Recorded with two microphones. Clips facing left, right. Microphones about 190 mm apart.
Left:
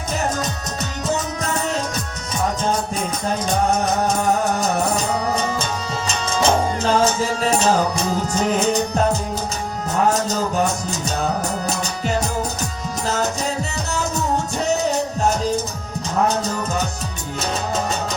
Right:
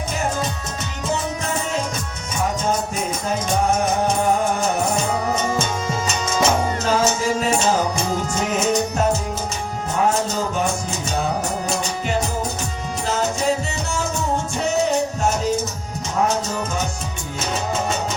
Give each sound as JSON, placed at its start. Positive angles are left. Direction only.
{"t": 6.4, "sound": "music", "side_deg": 30}
{"t": 8.4, "sound": "music", "side_deg": 35}